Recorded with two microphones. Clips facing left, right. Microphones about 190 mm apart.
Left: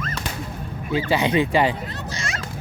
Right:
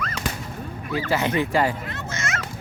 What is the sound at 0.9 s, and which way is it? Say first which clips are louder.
Speech: left 3 dB; 20° left (ahead or behind).